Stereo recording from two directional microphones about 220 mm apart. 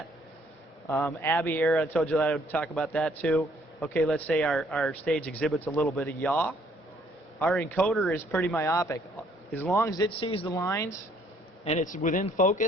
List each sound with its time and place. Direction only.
0.9 s speech: 10° left (ahead or behind)
11.6 s speech: 30° left (ahead or behind)